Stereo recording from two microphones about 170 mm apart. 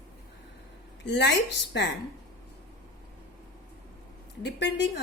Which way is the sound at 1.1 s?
90° left.